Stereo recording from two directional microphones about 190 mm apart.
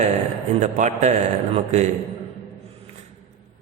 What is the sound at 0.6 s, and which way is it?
A man's voice, 40° right (ahead or behind).